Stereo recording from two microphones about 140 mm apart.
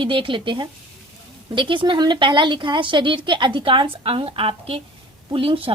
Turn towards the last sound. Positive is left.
turn(degrees=-40)  # may be behind; listen again after turning